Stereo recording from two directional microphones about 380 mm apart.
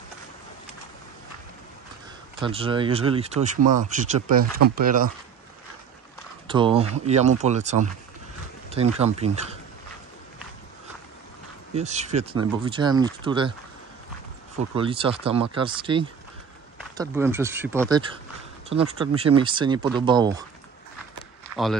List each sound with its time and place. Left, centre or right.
2.4 s speech: centre
6.4 s speech: centre
11.7 s speech: centre
14.8 s speech: centre